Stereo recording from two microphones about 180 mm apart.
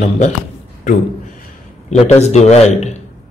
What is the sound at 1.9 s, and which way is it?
A man's voice, 35° left (ahead or behind).